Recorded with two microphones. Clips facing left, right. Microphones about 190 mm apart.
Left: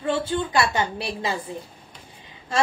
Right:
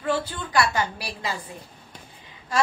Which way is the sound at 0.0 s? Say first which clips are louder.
Left 3 dB; 25° left (ahead or behind).